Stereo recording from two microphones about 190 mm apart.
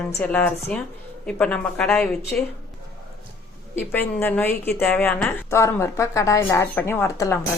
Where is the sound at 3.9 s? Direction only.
10° left (ahead or behind).